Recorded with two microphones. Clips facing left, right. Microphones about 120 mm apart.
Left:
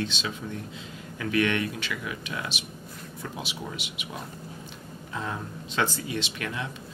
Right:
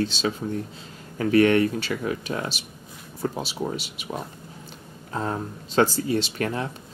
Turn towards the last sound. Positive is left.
turn(degrees=-40)  # may be behind; listen again after turning